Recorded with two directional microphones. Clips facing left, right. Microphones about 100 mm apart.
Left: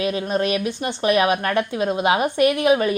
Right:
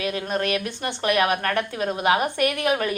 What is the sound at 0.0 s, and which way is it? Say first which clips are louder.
A woman's voice: left 4 dB; 20° left (ahead or behind).